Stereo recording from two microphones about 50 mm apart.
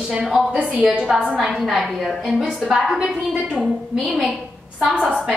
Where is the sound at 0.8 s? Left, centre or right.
Right.